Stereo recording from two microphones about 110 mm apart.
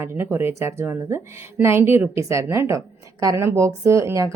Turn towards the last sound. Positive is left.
turn(degrees=-25)  # may be behind; listen again after turning